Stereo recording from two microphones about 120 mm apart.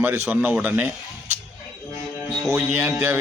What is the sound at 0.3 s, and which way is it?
Speech, 15° right (ahead or behind).